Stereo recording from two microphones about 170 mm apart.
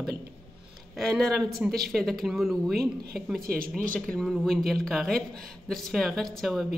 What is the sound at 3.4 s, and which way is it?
Speech, 60° right (ahead or behind).